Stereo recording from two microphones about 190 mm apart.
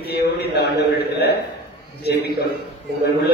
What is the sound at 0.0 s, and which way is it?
A man's voice, 60° left (ahead or behind).